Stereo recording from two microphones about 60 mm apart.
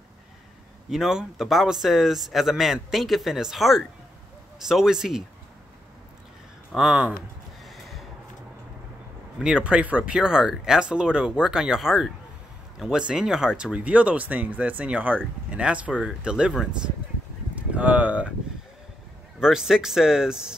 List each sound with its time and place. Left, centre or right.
0.8 s speech: centre
6.7 s speech: centre
7.6 s a sound: centre
9.4 s speech: centre
10.1 s speech: centre
19.4 s speech: centre